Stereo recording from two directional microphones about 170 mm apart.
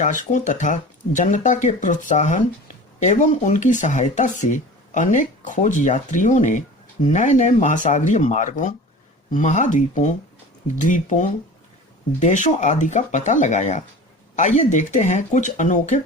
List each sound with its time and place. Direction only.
0.0 s speech: 45° left (ahead or behind)